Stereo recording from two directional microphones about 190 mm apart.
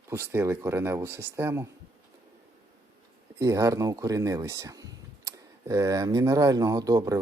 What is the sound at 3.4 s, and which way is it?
Speech, 15° right (ahead or behind).